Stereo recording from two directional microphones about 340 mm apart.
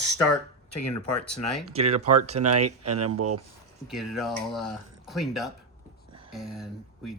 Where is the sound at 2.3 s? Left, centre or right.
Right.